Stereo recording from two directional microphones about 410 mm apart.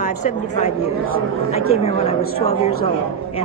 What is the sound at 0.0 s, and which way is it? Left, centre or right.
A woman's voice, centre.